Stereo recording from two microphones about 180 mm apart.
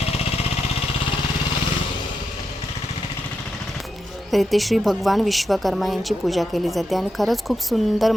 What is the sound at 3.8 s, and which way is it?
Speech, centre (ahead or behind).